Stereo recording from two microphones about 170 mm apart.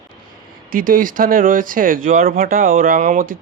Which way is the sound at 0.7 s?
55° right (ahead or behind).